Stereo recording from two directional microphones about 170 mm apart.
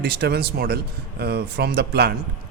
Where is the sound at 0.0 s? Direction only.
75° right (ahead or behind).